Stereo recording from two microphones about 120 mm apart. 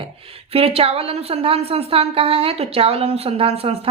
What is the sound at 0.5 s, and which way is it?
A woman's voice, 55° right (ahead or behind).